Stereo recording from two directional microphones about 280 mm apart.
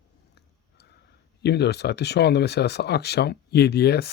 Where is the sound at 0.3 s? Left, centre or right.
Left.